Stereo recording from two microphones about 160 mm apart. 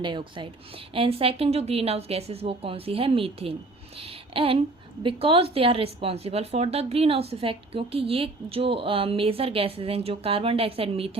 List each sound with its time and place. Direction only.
0.0 s a woman's voice: 30° right (ahead or behind)
3.9 s a sound: 35° right (ahead or behind)
5.0 s a woman's voice: 35° right (ahead or behind)